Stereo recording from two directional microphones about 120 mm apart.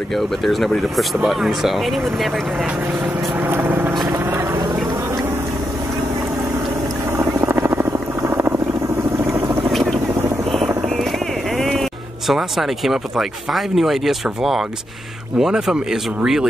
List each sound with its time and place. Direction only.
0.1 s speech: centre (ahead or behind)
3.3 s vehicle: 15° right (ahead or behind)
4.2 s a sound: 20° right (ahead or behind)
7.3 s vehicle: 20° right (ahead or behind)
9.7 s vehicle: centre (ahead or behind)
11.0 s speech: centre (ahead or behind)